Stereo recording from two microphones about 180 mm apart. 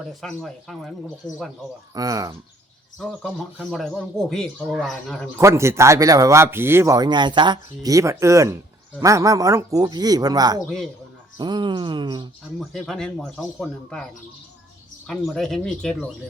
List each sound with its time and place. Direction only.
0.0 s speech: centre (ahead or behind)
1.2 s speech: 25° left (ahead or behind)
1.9 s speech: 20° right (ahead or behind)
3.0 s speech: 5° left (ahead or behind)
5.4 s speech: 15° right (ahead or behind)
12.5 s speech: centre (ahead or behind)